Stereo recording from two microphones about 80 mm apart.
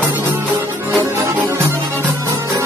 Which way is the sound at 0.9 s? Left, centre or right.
Right.